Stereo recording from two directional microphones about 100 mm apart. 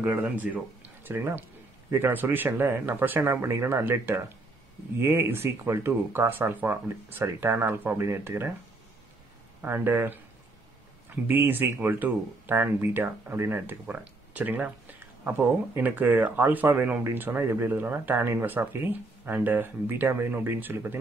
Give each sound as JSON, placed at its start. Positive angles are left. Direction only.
{"t": 0.0, "sound": "speech", "side_deg": -15}
{"t": 9.6, "sound": "speech", "side_deg": -20}